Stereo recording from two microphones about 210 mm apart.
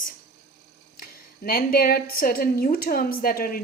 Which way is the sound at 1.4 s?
45° left (ahead or behind).